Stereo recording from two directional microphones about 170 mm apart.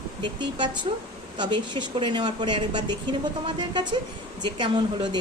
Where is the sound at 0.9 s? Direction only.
35° right (ahead or behind).